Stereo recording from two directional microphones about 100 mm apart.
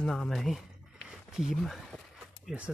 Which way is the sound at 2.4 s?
10° right (ahead or behind).